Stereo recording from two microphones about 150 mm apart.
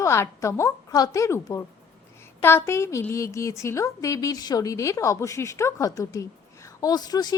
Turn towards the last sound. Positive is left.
turn(degrees=25)  # may be behind; listen again after turning